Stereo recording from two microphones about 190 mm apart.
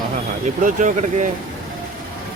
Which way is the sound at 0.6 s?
40° right (ahead or behind).